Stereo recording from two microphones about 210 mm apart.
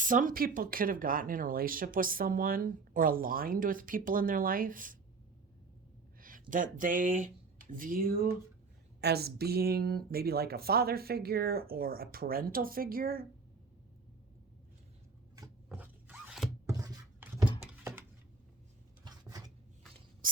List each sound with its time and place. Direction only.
0.0 s speech: 40° right (ahead or behind)
6.1 s speech: 40° right (ahead or behind)
15.4 s zipper: 10° right (ahead or behind)
16.6 s a sound: 15° right (ahead or behind)
19.0 s dishes: 15° right (ahead or behind)